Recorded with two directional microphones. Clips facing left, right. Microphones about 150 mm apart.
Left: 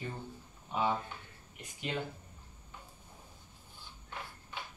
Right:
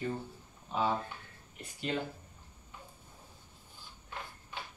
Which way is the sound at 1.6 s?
15° left (ahead or behind).